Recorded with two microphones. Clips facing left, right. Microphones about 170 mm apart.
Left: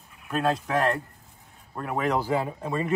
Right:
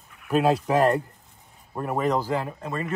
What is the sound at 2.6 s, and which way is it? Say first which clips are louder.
Speech: left 3 dB; 15° left (ahead or behind).